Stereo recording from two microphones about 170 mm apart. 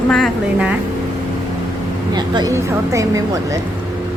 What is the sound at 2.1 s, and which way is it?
Speech, 25° right (ahead or behind).